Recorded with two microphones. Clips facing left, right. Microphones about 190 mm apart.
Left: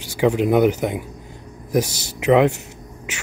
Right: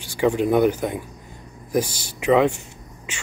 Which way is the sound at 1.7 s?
80° left.